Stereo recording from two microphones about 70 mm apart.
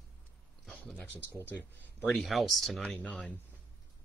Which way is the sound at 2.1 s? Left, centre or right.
Centre.